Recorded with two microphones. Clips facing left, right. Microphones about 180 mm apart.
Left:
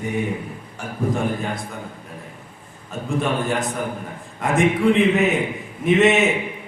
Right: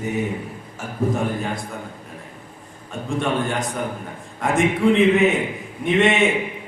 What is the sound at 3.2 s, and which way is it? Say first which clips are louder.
A man's voice: even; centre (ahead or behind).